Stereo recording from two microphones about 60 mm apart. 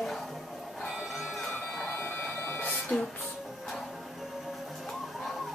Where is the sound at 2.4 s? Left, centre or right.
Left.